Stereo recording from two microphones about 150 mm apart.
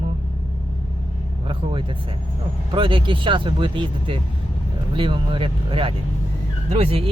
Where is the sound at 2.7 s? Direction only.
35° right (ahead or behind).